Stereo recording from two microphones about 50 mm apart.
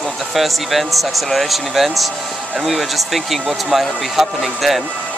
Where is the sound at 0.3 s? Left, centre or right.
Centre.